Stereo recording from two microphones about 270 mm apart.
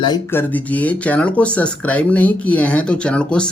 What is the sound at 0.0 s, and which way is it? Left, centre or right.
Speech, centre.